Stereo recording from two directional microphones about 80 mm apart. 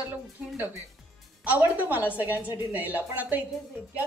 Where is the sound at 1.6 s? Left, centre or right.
Right.